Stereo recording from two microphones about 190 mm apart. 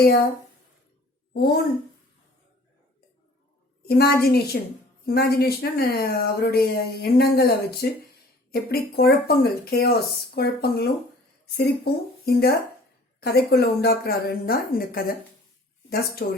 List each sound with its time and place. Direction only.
1.3 s a woman's voice: 55° left (ahead or behind)
3.8 s speech: 55° left (ahead or behind)
16.2 s speech: 55° left (ahead or behind)